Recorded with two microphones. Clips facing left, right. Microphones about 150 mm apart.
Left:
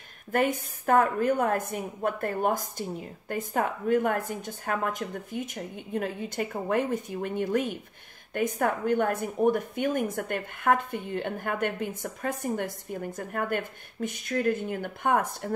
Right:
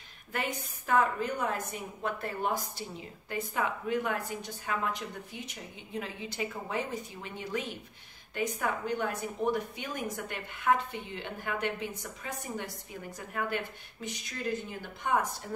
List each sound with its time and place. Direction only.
0.3 s a woman's voice: 50° left (ahead or behind)